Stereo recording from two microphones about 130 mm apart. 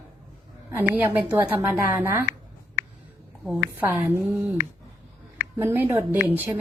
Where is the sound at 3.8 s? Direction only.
20° right (ahead or behind).